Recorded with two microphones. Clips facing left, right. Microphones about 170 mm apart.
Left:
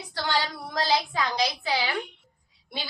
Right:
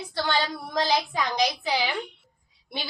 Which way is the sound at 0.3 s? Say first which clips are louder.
Even; 20° right (ahead or behind).